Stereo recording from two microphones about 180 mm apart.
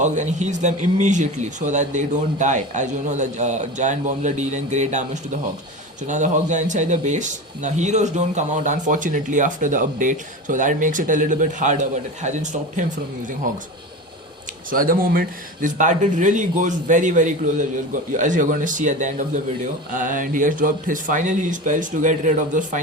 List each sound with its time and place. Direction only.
0.0 s speech: 40° right (ahead or behind)
14.7 s speech: 50° right (ahead or behind)